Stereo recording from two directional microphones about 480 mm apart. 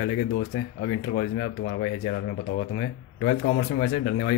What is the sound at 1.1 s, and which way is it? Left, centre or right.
A man's voice, centre.